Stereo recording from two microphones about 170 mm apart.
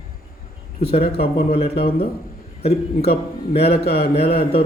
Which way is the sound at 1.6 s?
65° left (ahead or behind).